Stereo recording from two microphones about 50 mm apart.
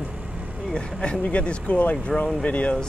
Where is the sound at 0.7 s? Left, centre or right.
Centre.